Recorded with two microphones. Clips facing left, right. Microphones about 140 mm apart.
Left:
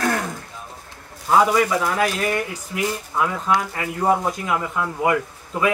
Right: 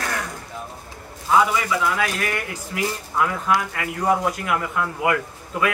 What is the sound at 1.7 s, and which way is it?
Speech, 30° left (ahead or behind).